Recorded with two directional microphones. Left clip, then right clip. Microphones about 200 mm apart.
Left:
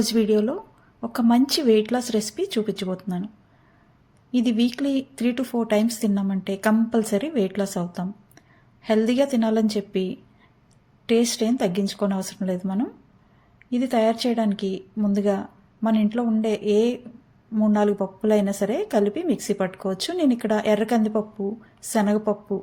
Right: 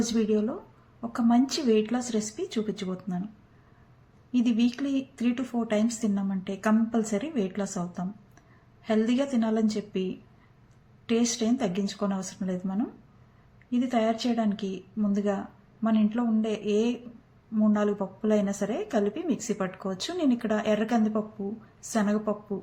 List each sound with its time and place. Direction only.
0.0 s speech: 50° left (ahead or behind)
4.3 s a woman's voice: 45° left (ahead or behind)